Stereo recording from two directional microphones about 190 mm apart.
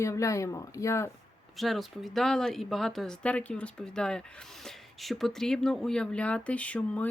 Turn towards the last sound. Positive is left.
turn(degrees=5)  # may be behind; listen again after turning